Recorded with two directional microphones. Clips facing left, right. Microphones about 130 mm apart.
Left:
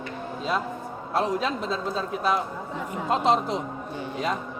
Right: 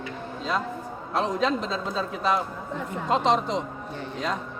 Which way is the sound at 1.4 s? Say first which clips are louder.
Right 2 dB; 10° left (ahead or behind).